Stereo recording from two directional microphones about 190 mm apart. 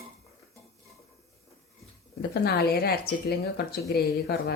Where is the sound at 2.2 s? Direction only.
55° left (ahead or behind).